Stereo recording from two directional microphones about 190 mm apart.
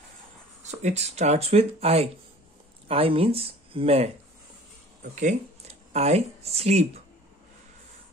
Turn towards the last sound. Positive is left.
turn(degrees=-35)  # may be behind; listen again after turning